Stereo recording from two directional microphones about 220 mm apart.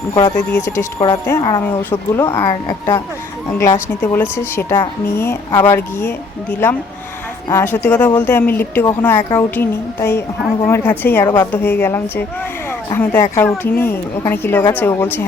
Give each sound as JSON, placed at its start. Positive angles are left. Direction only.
{"t": 0.1, "sound": "speech", "side_deg": 20}
{"t": 7.4, "sound": "speech", "side_deg": 10}